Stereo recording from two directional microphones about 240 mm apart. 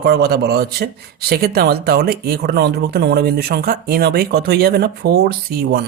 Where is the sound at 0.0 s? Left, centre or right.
Right.